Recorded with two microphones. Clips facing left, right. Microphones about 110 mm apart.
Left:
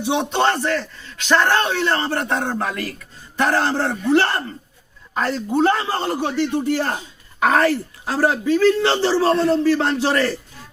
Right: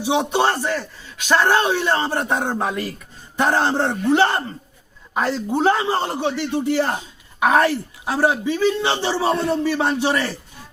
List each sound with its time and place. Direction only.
0.0 s a man's voice: 15° right (ahead or behind)